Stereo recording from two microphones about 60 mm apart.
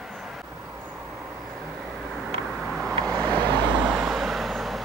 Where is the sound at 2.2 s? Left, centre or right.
Centre.